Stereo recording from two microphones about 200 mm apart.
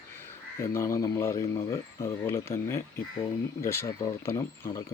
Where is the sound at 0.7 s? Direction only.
15° left (ahead or behind).